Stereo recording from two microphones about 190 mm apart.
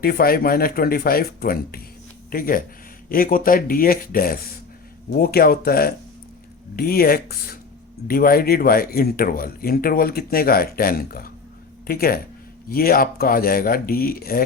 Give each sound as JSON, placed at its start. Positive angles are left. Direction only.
{"t": 0.0, "sound": "a man's voice", "side_deg": 50}